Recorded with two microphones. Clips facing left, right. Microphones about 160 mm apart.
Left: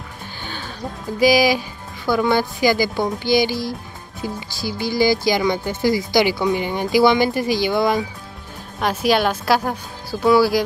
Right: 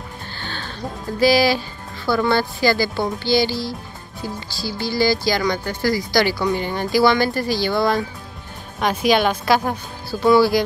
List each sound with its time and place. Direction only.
0.4 s music: 10° left (ahead or behind)
1.2 s a woman's voice: 15° left (ahead or behind)
9.0 s a woman's voice: 5° left (ahead or behind)